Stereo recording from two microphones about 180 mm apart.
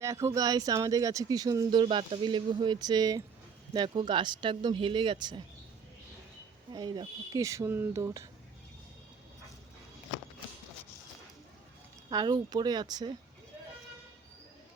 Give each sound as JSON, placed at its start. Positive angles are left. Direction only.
{"t": 0.0, "sound": "speech", "side_deg": -15}
{"t": 6.7, "sound": "speech", "side_deg": -25}
{"t": 12.1, "sound": "speech", "side_deg": -20}